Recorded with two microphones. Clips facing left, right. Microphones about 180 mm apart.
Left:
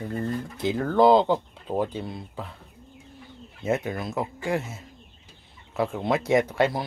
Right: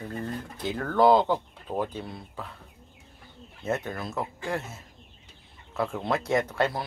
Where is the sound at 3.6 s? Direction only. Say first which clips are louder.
Left 4 dB; 10° left (ahead or behind).